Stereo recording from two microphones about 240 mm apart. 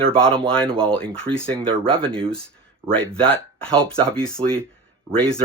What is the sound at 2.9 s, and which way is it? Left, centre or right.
Speech, centre.